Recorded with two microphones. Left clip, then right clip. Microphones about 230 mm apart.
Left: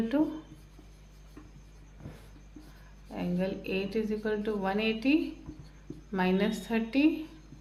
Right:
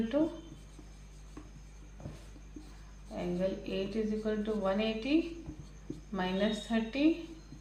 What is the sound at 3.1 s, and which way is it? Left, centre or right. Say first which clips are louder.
Speech: even; left.